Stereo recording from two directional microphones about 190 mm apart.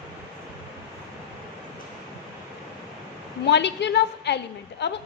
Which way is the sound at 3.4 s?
65° left (ahead or behind).